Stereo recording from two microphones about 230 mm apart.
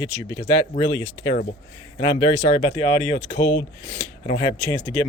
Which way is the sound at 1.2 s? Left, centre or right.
Left.